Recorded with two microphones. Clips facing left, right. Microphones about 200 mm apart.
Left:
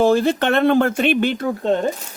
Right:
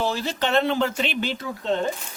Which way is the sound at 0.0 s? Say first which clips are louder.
Left 10 dB; 50° left (ahead or behind).